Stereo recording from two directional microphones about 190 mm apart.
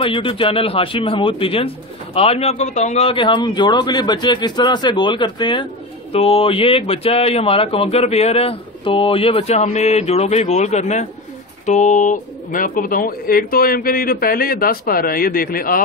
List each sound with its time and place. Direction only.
0.0 s a man's voice: 25° left (ahead or behind); by 15.8 s 50° left (ahead or behind)